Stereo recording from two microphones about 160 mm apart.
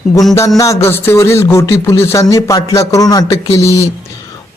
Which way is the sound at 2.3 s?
20° left (ahead or behind).